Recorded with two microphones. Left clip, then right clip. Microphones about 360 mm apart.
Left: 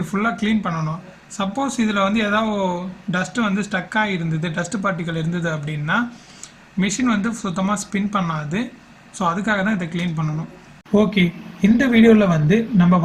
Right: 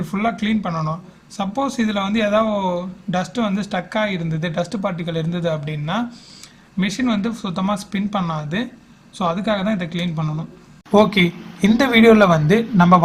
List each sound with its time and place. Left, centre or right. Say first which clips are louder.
0.1 s speech: even; centre